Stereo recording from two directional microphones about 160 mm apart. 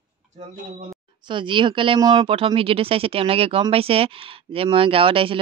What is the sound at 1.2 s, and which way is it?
Speech, 30° right (ahead or behind).